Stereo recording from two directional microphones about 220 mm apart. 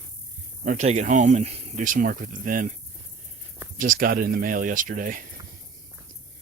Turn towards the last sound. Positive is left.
turn(degrees=-40)  # may be behind; listen again after turning